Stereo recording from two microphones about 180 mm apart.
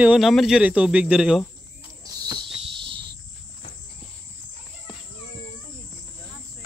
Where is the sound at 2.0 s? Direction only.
20° right (ahead or behind).